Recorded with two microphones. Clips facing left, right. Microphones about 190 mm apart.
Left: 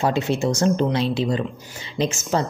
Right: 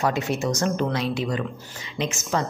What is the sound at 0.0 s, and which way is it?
A woman's voice, 30° left (ahead or behind).